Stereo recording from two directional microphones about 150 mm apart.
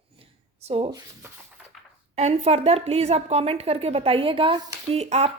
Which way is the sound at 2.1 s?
45° right (ahead or behind).